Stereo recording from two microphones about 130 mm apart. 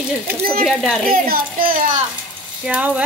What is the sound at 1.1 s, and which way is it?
Speech, 90° right.